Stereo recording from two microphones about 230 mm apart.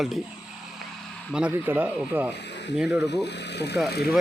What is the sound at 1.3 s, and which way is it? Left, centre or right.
Speech, centre.